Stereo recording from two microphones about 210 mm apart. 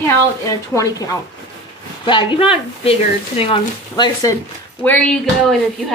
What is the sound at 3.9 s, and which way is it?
A woman's voice, 15° left (ahead or behind).